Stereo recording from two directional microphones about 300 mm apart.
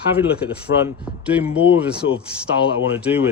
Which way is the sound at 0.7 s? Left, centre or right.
Left.